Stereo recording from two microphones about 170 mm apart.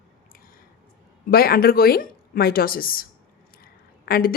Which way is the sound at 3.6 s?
60° left (ahead or behind).